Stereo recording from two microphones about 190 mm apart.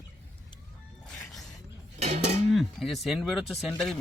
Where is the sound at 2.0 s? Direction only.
35° right (ahead or behind).